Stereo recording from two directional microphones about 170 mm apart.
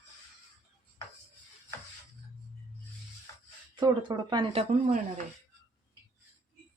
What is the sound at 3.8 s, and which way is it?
Speech, 25° right (ahead or behind).